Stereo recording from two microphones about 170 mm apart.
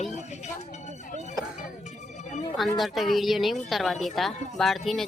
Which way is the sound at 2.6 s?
Centre (ahead or behind).